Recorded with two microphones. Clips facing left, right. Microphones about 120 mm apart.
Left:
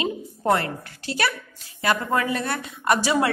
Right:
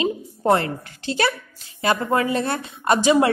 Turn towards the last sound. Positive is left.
turn(degrees=-25)  # may be behind; listen again after turning